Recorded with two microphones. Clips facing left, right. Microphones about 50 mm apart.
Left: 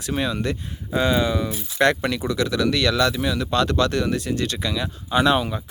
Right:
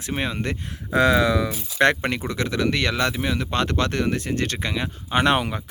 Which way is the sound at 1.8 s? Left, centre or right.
Right.